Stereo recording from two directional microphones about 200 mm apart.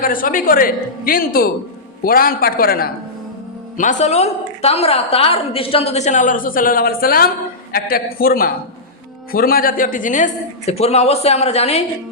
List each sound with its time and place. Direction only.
0.0 s a woman's voice: 45° left (ahead or behind)
3.8 s a woman's voice: 35° left (ahead or behind)